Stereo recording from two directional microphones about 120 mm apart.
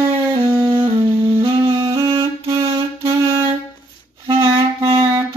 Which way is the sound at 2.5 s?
25° right (ahead or behind).